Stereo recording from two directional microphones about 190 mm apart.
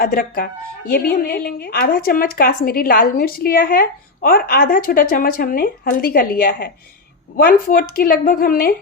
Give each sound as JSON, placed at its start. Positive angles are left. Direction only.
{"t": 0.0, "sound": "a woman's voice", "side_deg": 50}